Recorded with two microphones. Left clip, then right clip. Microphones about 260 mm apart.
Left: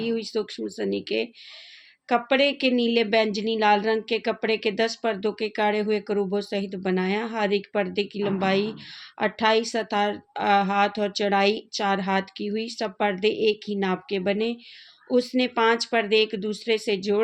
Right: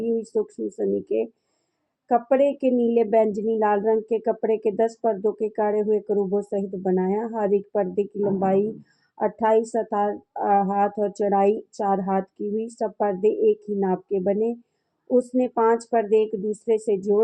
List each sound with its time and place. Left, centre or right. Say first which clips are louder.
0.0 s speech: right 3 dB; left
12.4 s speech: right 2 dB; centre